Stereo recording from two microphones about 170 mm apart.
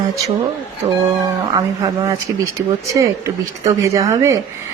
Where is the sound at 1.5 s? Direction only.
20° right (ahead or behind).